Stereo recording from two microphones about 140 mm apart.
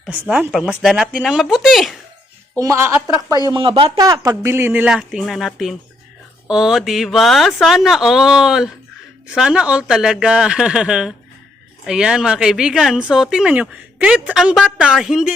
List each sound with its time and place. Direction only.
0.0 s speech: 5° right (ahead or behind)
2.6 s a woman's voice: 20° right (ahead or behind)
3.4 s speech: 35° right (ahead or behind)
3.9 s speech: 25° right (ahead or behind); by 15.3 s centre (ahead or behind)